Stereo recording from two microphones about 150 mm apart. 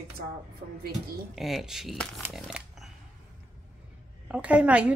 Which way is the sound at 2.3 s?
Centre (ahead or behind).